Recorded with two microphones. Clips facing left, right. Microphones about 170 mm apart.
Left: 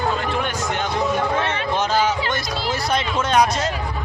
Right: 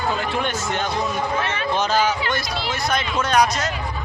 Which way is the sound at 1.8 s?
20° left (ahead or behind).